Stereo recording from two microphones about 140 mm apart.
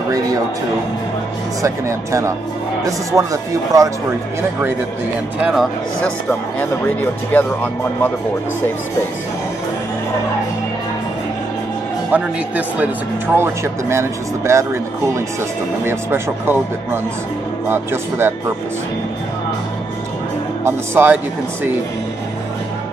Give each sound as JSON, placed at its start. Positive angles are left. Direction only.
{"t": 1.6, "sound": "speech", "side_deg": -20}
{"t": 5.4, "sound": "speech", "side_deg": 0}
{"t": 6.6, "sound": "speech", "side_deg": 15}
{"t": 12.1, "sound": "speech", "side_deg": -10}
{"t": 20.6, "sound": "speech", "side_deg": -15}